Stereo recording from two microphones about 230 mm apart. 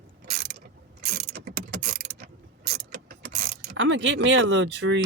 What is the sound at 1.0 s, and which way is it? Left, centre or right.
Mechanisms, right.